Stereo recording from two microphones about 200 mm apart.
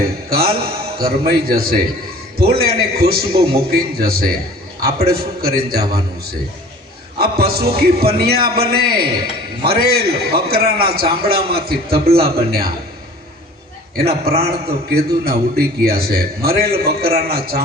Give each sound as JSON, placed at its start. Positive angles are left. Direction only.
{"t": 0.0, "sound": "a man's voice", "side_deg": -50}
{"t": 7.2, "sound": "a man's voice", "side_deg": -50}
{"t": 13.9, "sound": "a man's voice", "side_deg": -50}